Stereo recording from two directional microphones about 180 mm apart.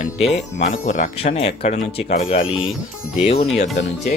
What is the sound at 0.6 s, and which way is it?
Speech, 45° left (ahead or behind).